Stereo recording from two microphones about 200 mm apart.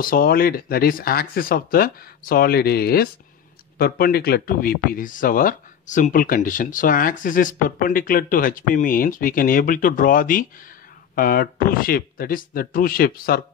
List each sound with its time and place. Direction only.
0.0 s speech: 45° left (ahead or behind)